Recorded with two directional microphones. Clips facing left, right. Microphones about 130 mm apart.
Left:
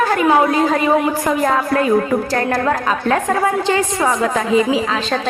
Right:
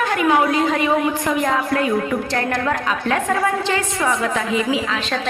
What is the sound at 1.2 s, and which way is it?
A woman's voice, 40° left (ahead or behind).